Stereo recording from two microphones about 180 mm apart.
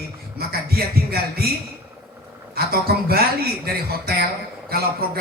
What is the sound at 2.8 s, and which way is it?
Speech, 60° right (ahead or behind).